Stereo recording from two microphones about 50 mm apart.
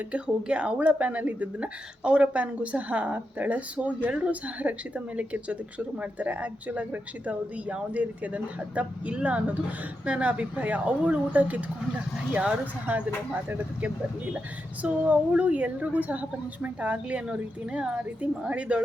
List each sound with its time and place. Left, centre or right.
0.1 s a woman's voice: right